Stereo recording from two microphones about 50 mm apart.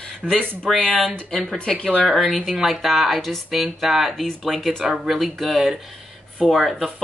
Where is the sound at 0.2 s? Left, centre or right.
Centre.